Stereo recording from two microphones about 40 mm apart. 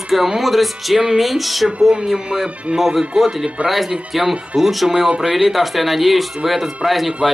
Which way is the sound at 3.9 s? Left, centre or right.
Centre.